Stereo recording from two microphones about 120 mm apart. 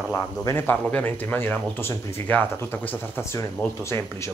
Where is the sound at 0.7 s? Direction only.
15° left (ahead or behind).